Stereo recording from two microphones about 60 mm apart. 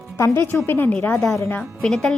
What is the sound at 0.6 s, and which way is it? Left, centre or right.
Speech, left.